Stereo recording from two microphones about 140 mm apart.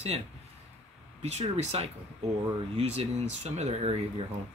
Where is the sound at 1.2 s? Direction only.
50° right (ahead or behind).